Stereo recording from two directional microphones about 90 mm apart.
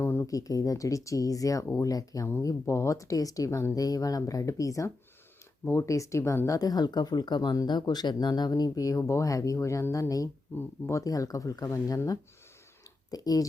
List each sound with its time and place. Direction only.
0.0 s a sound: 25° left (ahead or behind)
0.3 s speech: 40° left (ahead or behind)
6.6 s speech: 45° left (ahead or behind)
13.1 s speech: 45° left (ahead or behind)